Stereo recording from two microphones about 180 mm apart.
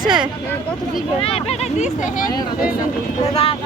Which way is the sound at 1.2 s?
35° left (ahead or behind).